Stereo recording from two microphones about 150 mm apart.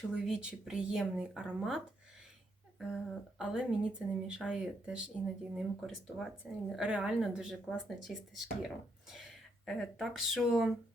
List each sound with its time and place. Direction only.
0.1 s speech: 5° right (ahead or behind)